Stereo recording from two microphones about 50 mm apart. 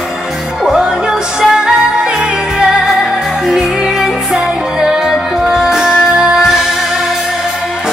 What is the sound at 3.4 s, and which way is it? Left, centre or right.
Music, centre.